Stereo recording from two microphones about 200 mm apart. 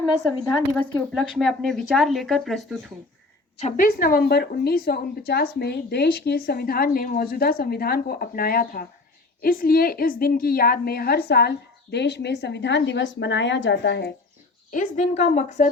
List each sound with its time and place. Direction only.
1.1 s speech: centre (ahead or behind)
3.6 s a woman's voice: 45° left (ahead or behind)
14.7 s a woman's voice: 40° left (ahead or behind)